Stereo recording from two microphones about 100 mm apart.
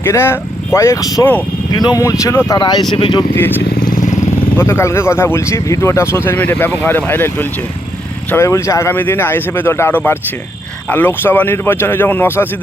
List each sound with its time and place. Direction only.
0.0 s speech: 25° left (ahead or behind)
1.2 s speech: 15° left (ahead or behind)
1.7 s speech: 45° left (ahead or behind)
2.0 s speech: 30° left (ahead or behind)
2.6 s speech: 45° left (ahead or behind)
4.5 s speech: 25° left (ahead or behind)